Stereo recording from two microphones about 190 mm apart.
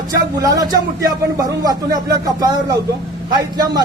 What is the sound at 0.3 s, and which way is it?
Speech, 20° right (ahead or behind).